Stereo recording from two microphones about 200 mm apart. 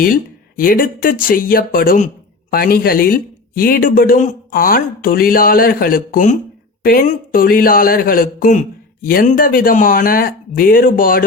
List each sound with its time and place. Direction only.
0.0 s speech: 45° left (ahead or behind)